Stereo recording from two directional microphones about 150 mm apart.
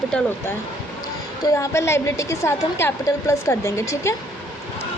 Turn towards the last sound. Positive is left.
turn(degrees=20)  # may be behind; listen again after turning